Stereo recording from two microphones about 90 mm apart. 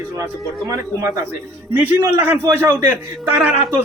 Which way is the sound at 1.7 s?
20° right (ahead or behind).